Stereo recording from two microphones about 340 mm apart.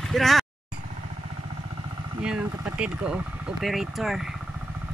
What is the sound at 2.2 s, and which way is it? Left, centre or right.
Speech, centre.